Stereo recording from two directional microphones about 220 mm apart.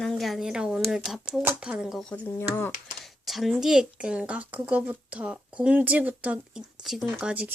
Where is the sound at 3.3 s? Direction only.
Centre (ahead or behind).